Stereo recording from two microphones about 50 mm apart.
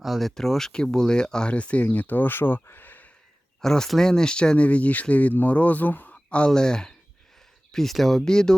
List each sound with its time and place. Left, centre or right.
0.0 s speech: centre; by 3.1 s left
3.6 s speech: centre; by 6.1 s left
6.3 s speech: centre